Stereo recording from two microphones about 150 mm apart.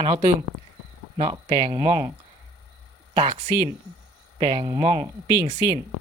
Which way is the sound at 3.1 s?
35° right (ahead or behind).